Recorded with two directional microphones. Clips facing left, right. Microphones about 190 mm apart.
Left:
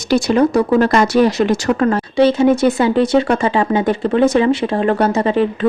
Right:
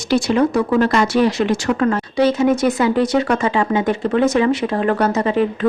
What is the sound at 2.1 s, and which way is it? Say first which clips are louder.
Speech: left 4 dB; 30° left (ahead or behind).